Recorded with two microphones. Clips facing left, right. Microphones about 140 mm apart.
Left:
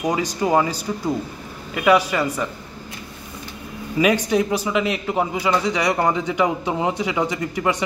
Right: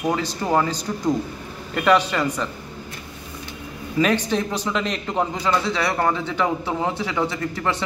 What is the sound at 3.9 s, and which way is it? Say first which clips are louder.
A man's voice: left 2 dB; 10° left (ahead or behind).